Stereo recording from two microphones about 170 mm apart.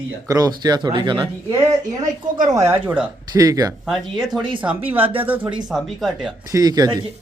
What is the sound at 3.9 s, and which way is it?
A man's voice, centre (ahead or behind).